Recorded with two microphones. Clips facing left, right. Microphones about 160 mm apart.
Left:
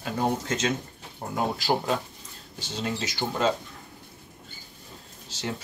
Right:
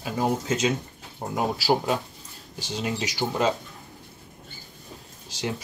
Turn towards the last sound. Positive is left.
turn(degrees=-10)  # may be behind; listen again after turning